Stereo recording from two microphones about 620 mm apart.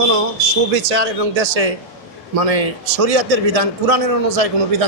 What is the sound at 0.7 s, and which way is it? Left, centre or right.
A man's voice, right.